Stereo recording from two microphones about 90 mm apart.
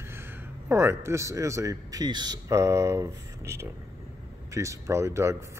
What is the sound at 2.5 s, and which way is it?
Speech, 35° right (ahead or behind).